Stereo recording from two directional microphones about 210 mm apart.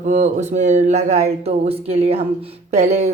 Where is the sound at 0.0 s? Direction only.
35° right (ahead or behind).